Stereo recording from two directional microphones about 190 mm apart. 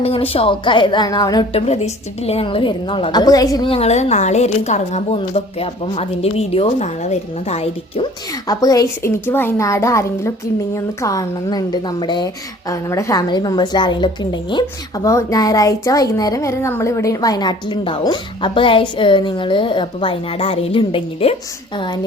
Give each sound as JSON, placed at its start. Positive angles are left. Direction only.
{"t": 0.0, "sound": "a woman's voice", "side_deg": 30}
{"t": 1.5, "sound": "a woman's voice", "side_deg": 35}
{"t": 3.7, "sound": "a woman's voice", "side_deg": 35}
{"t": 8.4, "sound": "a woman's voice", "side_deg": 20}